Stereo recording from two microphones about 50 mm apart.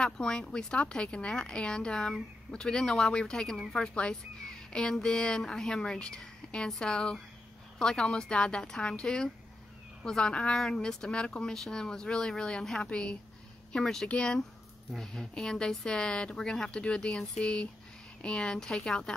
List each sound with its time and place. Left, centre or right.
0.0 s a woman's voice: centre
4.5 s a sound: centre
4.9 s a woman's voice: centre
13.7 s speech: centre
14.0 s a woman's voice: centre
14.9 s speech: centre
17.2 s speech: centre